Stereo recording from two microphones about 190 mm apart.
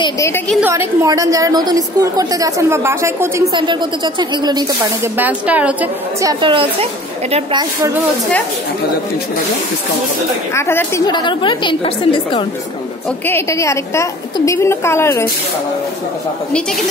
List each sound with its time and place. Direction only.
0.0 s a woman's voice: 15° left (ahead or behind)
0.6 s a woman's voice: 10° right (ahead or behind)
6.2 s a woman's voice: 25° right (ahead or behind)
10.5 s a woman's voice: 10° left (ahead or behind)
11.1 s a woman's voice: 25° left (ahead or behind)
13.3 s a woman's voice: 15° left (ahead or behind)